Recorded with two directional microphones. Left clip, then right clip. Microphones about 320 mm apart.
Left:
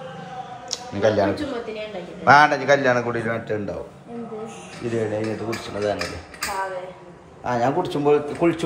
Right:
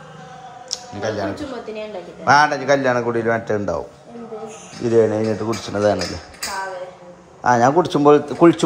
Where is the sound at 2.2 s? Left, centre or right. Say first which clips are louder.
Even; centre.